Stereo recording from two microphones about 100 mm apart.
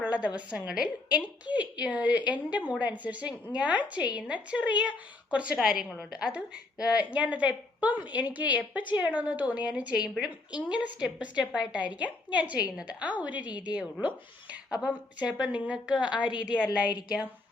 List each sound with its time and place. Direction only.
0.0 s a sound: 15° right (ahead or behind)
0.3 s a woman's voice: 10° right (ahead or behind)
13.5 s a woman's voice: 45° left (ahead or behind)
14.5 s a woman's voice: 10° right (ahead or behind)
16.3 s a woman's voice: 45° left (ahead or behind)